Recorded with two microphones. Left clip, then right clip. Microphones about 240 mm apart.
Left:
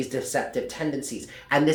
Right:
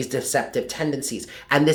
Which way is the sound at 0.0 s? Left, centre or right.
Right.